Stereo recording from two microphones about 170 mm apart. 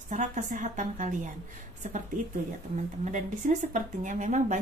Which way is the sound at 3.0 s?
45° right (ahead or behind).